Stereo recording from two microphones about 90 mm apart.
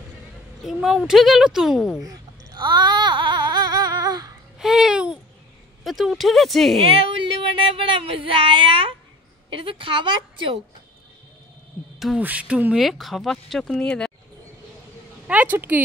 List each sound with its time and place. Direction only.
0.6 s speech: 5° right (ahead or behind)
2.0 s baby cry: 50° right (ahead or behind)
4.6 s babbling: 5° right (ahead or behind)
5.9 s speech: centre (ahead or behind)
6.9 s a woman's voice: 90° right; by 10.6 s 65° right (ahead or behind)
12.2 s speech: 15° right (ahead or behind)
12.7 s speech: 5° right (ahead or behind)
15.2 s speech: 20° right (ahead or behind)